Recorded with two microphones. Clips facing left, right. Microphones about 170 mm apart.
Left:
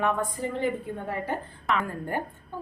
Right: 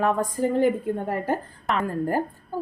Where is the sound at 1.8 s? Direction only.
35° right (ahead or behind).